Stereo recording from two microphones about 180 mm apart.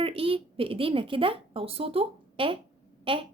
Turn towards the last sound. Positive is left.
turn(degrees=-30)  # may be behind; listen again after turning